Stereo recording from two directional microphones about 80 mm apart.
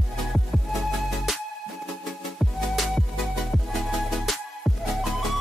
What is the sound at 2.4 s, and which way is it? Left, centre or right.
Music, centre.